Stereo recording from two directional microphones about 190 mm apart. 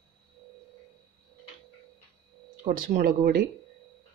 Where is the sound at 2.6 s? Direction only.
50° right (ahead or behind).